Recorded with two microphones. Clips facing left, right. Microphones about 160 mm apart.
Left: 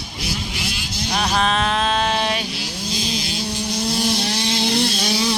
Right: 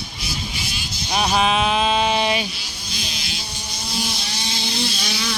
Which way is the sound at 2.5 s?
90° left.